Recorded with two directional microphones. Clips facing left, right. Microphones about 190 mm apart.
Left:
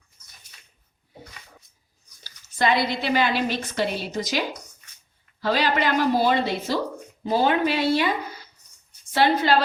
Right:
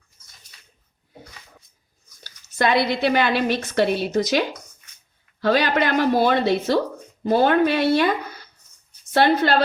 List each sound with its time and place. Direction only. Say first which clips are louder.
2.2 s a woman's voice: right 2 dB; 60° right (ahead or behind)
9.4 s a woman's voice: right 2 dB; 60° right (ahead or behind)